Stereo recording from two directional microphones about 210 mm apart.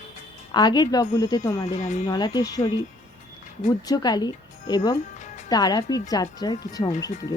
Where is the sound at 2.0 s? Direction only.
20° left (ahead or behind).